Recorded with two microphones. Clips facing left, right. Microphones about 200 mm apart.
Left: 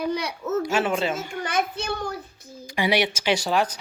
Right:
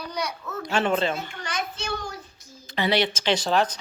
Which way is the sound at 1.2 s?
55° left (ahead or behind).